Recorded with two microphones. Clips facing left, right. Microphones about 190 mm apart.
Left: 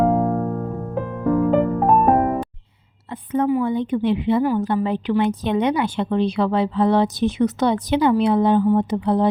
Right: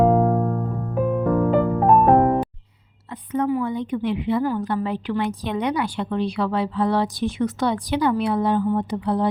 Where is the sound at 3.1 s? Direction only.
25° left (ahead or behind).